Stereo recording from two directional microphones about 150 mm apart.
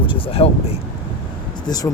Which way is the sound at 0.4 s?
35° left (ahead or behind).